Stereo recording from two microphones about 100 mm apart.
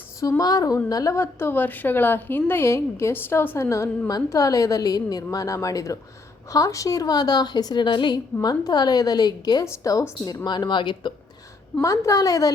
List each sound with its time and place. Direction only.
0.2 s a woman's voice: 35° left (ahead or behind)
10.4 s a woman's voice: 45° left (ahead or behind)
11.8 s a woman's voice: 35° left (ahead or behind)